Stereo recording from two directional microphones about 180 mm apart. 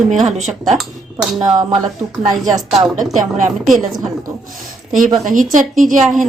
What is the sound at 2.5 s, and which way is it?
Speech, 30° right (ahead or behind).